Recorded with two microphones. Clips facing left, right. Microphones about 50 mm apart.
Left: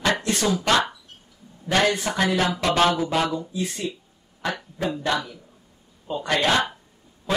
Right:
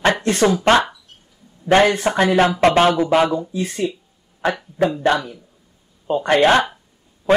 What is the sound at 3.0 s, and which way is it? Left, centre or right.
Speech, right.